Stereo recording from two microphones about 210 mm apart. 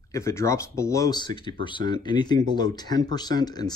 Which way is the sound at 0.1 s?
15° left (ahead or behind).